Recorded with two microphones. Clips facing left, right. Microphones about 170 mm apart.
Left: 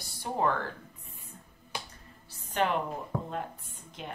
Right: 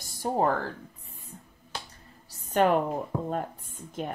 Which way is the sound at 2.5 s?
45° right (ahead or behind).